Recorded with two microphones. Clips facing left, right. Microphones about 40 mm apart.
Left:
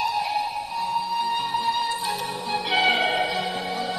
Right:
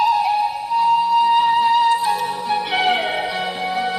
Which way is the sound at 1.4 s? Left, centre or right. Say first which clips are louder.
Right 10 dB; right.